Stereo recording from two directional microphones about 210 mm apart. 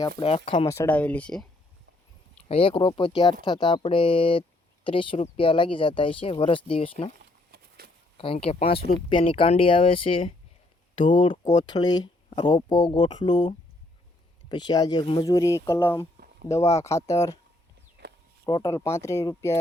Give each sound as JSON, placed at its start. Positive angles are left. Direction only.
{"t": 0.2, "sound": "speech", "side_deg": 25}
{"t": 0.7, "sound": "speech", "side_deg": 10}
{"t": 2.5, "sound": "speech", "side_deg": 25}
{"t": 7.5, "sound": "a sound", "side_deg": -50}
{"t": 8.2, "sound": "speech", "side_deg": 25}
{"t": 14.5, "sound": "speech", "side_deg": 20}
{"t": 16.5, "sound": "speech", "side_deg": 30}
{"t": 18.0, "sound": "a sound", "side_deg": -55}
{"t": 18.4, "sound": "speech", "side_deg": 20}